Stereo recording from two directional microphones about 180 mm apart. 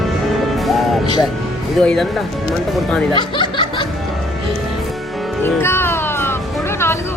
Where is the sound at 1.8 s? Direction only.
Centre (ahead or behind).